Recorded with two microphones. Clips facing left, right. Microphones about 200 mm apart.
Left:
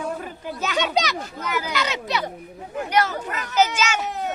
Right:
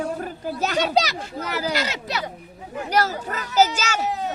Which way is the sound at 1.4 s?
35° right (ahead or behind).